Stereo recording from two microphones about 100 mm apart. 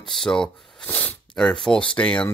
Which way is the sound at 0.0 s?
5° left (ahead or behind).